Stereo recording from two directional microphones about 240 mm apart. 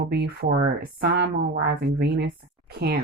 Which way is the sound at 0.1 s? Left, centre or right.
Right.